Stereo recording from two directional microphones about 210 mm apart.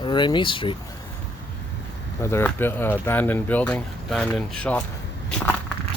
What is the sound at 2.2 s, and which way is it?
Speech, 10° left (ahead or behind).